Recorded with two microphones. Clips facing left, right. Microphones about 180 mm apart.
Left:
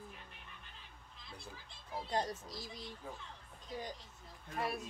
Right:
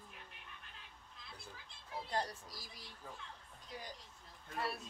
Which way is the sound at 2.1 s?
20° left (ahead or behind).